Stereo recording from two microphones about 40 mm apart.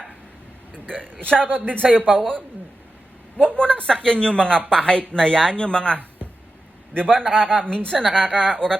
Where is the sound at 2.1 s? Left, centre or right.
Centre.